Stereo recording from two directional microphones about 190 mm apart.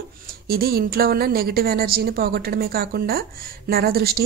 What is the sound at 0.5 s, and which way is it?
A woman's voice, 55° right (ahead or behind).